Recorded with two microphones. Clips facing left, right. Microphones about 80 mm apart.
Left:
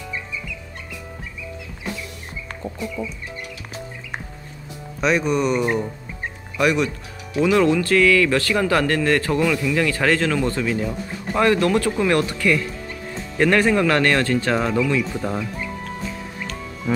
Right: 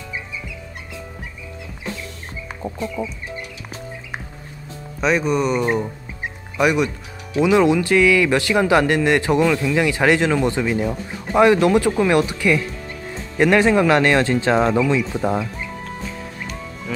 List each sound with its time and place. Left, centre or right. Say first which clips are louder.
5.0 s speech: right 1 dB; centre; by 15.4 s right